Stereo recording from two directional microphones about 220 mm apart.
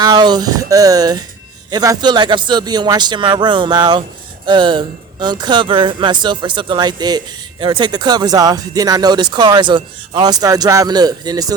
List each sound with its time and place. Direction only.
0.0 s speech: 20° right (ahead or behind)